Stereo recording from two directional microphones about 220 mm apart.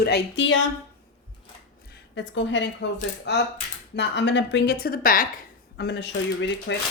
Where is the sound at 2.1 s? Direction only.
55° left (ahead or behind).